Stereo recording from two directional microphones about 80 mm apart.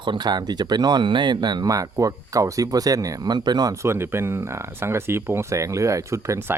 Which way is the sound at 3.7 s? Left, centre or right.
Right.